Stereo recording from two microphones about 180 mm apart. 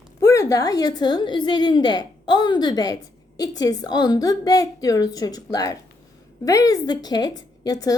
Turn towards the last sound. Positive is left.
turn(degrees=20)  # may be behind; listen again after turning